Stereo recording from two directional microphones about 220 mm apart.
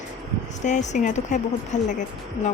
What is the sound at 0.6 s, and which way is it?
Speech, 35° left (ahead or behind).